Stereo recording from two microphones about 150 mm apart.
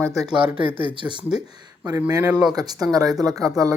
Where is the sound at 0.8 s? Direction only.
35° right (ahead or behind).